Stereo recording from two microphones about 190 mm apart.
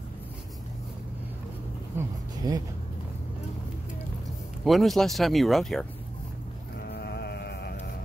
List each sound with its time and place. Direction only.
2.0 s speech: 20° right (ahead or behind)
4.6 s speech: centre (ahead or behind)
6.9 s music: 60° left (ahead or behind)